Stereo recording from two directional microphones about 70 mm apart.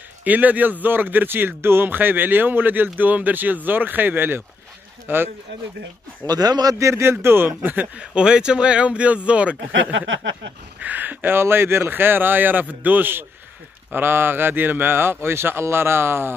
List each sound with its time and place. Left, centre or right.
0.2 s speech: right
6.2 s a man's voice: right
6.8 s a man's voice: right
8.0 s speech: centre
10.8 s a man's voice: right